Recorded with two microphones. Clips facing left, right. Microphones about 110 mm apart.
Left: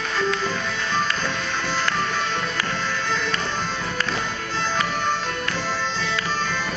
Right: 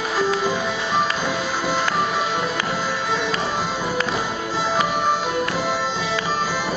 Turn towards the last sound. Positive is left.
turn(degrees=-5)  # may be behind; listen again after turning